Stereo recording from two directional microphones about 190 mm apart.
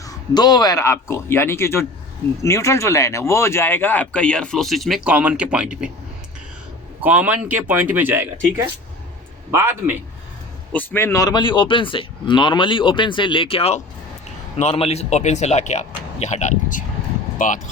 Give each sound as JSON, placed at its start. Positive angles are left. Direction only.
{"t": 0.0, "sound": "speech", "side_deg": 20}
{"t": 7.0, "sound": "speech", "side_deg": -10}
{"t": 10.7, "sound": "a man's voice", "side_deg": 10}